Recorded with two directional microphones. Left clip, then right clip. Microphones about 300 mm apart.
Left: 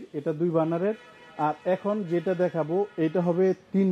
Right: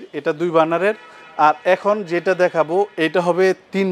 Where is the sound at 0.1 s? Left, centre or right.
Centre.